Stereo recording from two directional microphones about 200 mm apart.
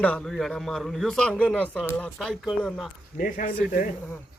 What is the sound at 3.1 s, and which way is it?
Speech, 40° left (ahead or behind).